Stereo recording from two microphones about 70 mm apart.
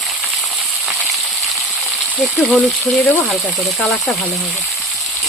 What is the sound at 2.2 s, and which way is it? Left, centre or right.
Speech, centre.